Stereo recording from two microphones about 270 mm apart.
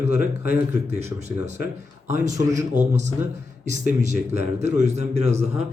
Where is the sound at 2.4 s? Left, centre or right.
Right.